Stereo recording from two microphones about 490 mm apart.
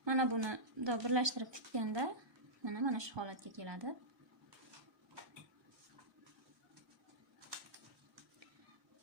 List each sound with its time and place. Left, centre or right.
0.0 s speech: right